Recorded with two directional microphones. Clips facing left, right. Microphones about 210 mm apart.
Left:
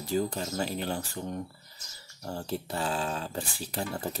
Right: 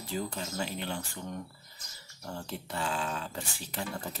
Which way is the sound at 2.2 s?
35° left (ahead or behind).